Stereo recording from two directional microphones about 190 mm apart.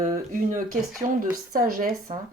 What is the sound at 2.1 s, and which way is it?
Speech, 35° right (ahead or behind).